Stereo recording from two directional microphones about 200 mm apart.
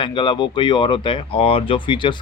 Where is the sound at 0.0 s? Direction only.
25° left (ahead or behind).